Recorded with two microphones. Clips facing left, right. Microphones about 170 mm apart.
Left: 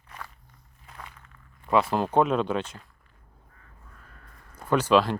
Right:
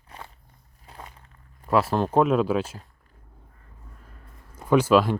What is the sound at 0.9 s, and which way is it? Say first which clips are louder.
Walk: right 2 dB; 30° right (ahead or behind).